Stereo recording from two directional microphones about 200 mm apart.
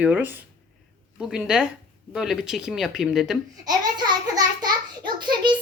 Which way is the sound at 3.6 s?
20° right (ahead or behind).